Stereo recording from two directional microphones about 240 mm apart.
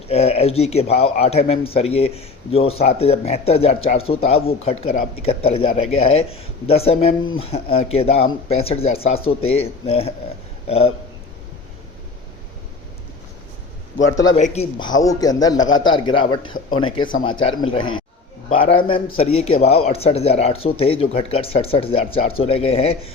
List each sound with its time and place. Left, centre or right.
0.1 s a man's voice: left
14.3 s a man's voice: left